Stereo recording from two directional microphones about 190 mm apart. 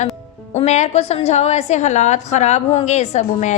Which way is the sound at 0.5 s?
35° left (ahead or behind).